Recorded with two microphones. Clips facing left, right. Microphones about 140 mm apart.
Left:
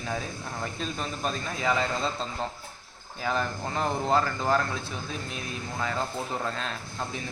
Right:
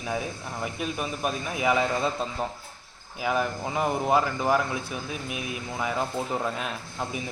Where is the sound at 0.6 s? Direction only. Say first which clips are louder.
Right 4 dB; 15° right (ahead or behind).